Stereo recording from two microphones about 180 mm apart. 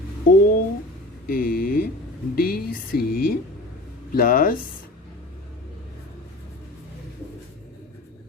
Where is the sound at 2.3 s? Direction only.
55° left (ahead or behind).